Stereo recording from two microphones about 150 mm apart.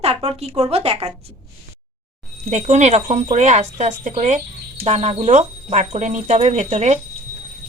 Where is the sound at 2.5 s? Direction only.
50° right (ahead or behind).